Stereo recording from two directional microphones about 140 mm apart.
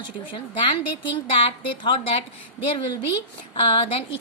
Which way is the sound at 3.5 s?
35° left (ahead or behind).